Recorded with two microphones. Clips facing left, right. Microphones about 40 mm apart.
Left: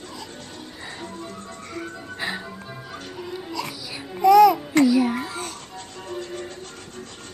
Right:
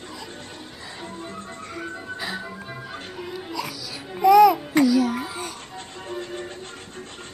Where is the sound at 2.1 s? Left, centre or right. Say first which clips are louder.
Left 2 dB; left.